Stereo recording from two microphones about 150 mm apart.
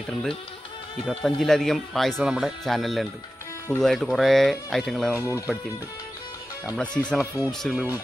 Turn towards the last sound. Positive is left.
turn(degrees=0)  # may be behind; listen again after turning